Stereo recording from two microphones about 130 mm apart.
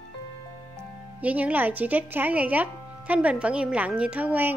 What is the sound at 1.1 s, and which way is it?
Speech, 10° right (ahead or behind).